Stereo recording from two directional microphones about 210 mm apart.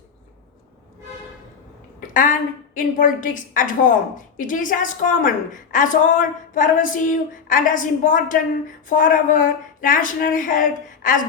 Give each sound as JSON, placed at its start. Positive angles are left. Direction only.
{"t": 2.0, "sound": "a woman's voice", "side_deg": 40}